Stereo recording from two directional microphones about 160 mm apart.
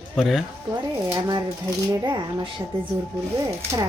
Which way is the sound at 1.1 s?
25° right (ahead or behind).